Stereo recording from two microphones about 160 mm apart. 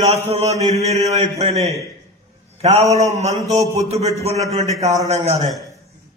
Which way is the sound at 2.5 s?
45° right (ahead or behind).